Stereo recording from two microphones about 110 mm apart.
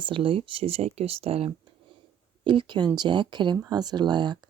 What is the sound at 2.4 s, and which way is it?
Speech, 50° right (ahead or behind).